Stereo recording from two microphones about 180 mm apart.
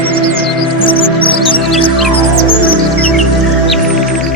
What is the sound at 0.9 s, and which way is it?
Music, 30° left (ahead or behind).